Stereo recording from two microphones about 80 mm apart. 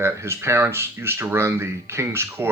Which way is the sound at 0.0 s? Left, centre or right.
Right.